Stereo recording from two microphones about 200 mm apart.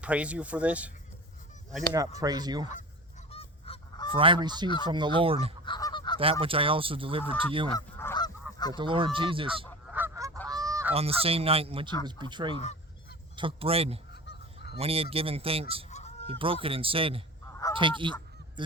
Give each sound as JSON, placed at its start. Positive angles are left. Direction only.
{"t": 0.0, "sound": "speech", "side_deg": -5}
{"t": 2.2, "sound": "speech", "side_deg": -20}
{"t": 3.3, "sound": "goose", "side_deg": 25}
{"t": 4.1, "sound": "speech", "side_deg": -25}
{"t": 5.6, "sound": "goose", "side_deg": 20}
{"t": 6.4, "sound": "speech", "side_deg": -25}
{"t": 7.8, "sound": "goose", "side_deg": 15}
{"t": 8.7, "sound": "speech", "side_deg": -25}
{"t": 9.9, "sound": "goose", "side_deg": -10}
{"t": 10.9, "sound": "speech", "side_deg": -30}
{"t": 14.1, "sound": "goose", "side_deg": 55}
{"t": 14.8, "sound": "speech", "side_deg": -30}
{"t": 15.9, "sound": "goose", "side_deg": 35}
{"t": 16.2, "sound": "speech", "side_deg": -25}